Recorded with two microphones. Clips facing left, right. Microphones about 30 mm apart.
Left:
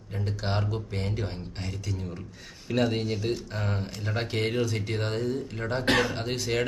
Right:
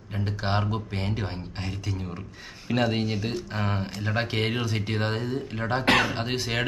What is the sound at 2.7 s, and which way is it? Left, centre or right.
Speech, right.